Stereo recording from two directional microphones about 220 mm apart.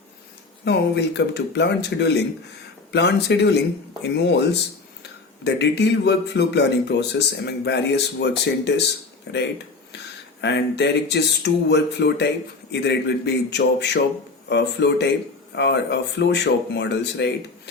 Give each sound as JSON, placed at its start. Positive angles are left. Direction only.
{"t": 0.6, "sound": "speech", "side_deg": 50}
{"t": 10.4, "sound": "speech", "side_deg": 50}